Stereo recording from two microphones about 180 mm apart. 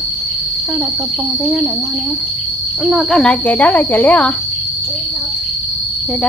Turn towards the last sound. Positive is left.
turn(degrees=10)  # may be behind; listen again after turning